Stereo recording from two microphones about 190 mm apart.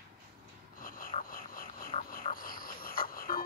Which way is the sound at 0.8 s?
45° left (ahead or behind).